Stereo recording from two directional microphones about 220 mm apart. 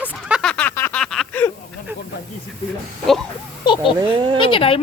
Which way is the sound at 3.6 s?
20° left (ahead or behind).